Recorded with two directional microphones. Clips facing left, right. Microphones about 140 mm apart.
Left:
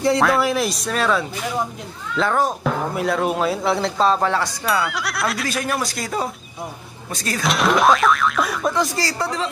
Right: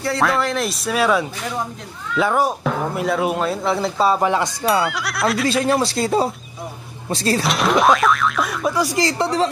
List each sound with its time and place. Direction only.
0.2 s speech: 5° left (ahead or behind)
2.6 s speech: centre (ahead or behind); by 4.6 s 20° right (ahead or behind)
4.8 s speech: centre (ahead or behind)
5.5 s speech: 25° right (ahead or behind)
7.4 s speech: centre (ahead or behind)
8.9 s speech: 20° right (ahead or behind)